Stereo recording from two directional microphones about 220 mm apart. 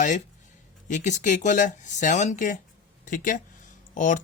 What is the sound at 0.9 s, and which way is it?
Speech, 35° left (ahead or behind).